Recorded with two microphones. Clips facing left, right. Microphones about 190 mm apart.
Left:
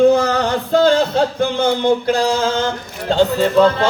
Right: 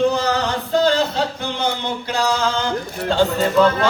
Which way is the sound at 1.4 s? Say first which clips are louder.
Left 7 dB; 50° left (ahead or behind).